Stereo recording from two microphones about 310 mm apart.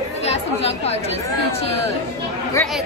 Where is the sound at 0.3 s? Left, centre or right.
Centre.